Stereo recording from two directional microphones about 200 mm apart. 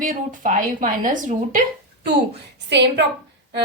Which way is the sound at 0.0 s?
40° right (ahead or behind).